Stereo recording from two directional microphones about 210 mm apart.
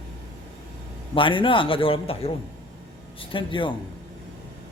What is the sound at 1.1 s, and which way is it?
A man's voice, 25° left (ahead or behind).